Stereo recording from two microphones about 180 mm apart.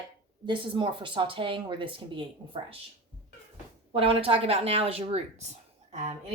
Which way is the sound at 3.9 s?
30° right (ahead or behind).